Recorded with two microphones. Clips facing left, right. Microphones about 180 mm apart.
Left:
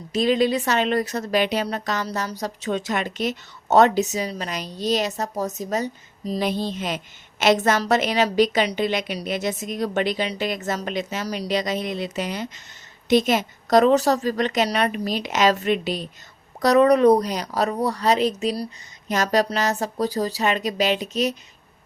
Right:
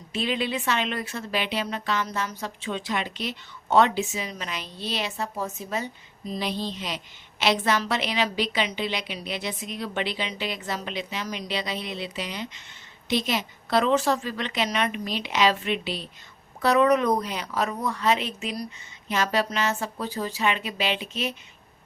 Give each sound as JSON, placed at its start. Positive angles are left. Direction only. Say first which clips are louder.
{"t": 0.1, "sound": "a woman's voice", "louder": "left 8 dB", "side_deg": 40}